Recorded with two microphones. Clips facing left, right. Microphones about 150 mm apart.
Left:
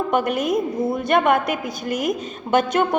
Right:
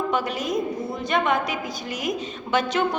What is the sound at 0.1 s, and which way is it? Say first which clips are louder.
A woman's voice: left 5 dB; 55° left (ahead or behind).